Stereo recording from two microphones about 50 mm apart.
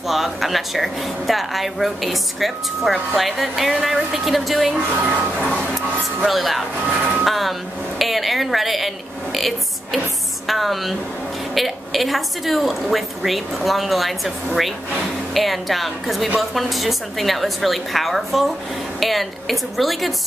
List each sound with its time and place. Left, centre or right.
0.1 s a woman's voice: centre
6.2 s a woman's voice: centre